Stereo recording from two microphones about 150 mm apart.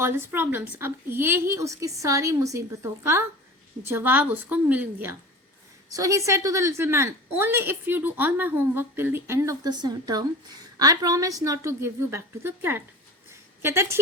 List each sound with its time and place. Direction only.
0.0 s a woman's voice: 15° right (ahead or behind)
5.9 s a woman's voice: 20° right (ahead or behind)
9.6 s a woman's voice: 30° right (ahead or behind)